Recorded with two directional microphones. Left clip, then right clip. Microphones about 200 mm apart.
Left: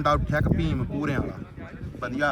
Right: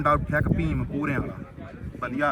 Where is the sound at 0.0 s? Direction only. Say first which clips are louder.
Right 1 dB; 10° left (ahead or behind).